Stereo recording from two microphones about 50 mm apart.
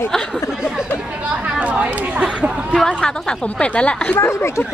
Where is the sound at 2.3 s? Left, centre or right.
Centre.